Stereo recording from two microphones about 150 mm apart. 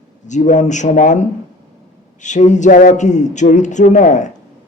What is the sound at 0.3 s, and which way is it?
Speech, 55° left (ahead or behind).